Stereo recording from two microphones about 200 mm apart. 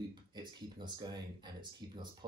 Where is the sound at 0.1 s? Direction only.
25° right (ahead or behind).